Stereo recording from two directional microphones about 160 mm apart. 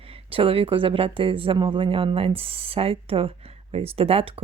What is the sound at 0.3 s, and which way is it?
Speech, 35° right (ahead or behind).